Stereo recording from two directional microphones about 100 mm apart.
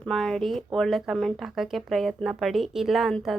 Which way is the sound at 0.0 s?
5° left (ahead or behind).